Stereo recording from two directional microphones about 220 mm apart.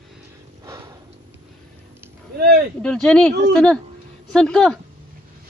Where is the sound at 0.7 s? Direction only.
15° right (ahead or behind).